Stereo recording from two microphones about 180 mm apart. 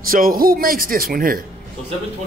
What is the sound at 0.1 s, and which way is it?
A man's voice, 50° right (ahead or behind).